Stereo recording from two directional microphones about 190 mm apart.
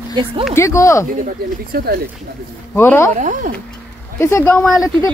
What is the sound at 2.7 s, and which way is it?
Speech, 10° left (ahead or behind).